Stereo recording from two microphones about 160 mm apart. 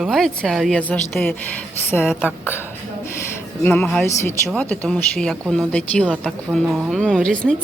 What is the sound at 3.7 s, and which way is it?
A woman's voice, 5° left (ahead or behind).